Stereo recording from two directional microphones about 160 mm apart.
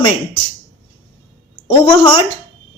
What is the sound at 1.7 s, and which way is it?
Speech, 30° left (ahead or behind).